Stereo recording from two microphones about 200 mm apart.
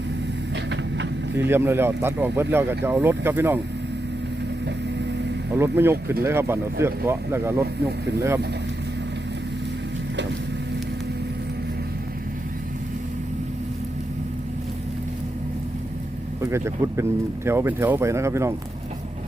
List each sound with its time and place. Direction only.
0.5 s vehicle: 60° right (ahead or behind)
1.5 s speech: 10° right (ahead or behind)
5.5 s speech: 10° right (ahead or behind)
16.4 s speech: 15° right (ahead or behind)